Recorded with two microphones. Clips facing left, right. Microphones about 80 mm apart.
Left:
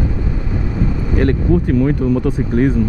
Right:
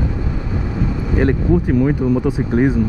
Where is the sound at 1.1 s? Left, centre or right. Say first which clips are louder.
Even; centre.